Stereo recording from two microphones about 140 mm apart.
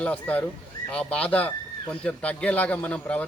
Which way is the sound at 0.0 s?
10° left (ahead or behind).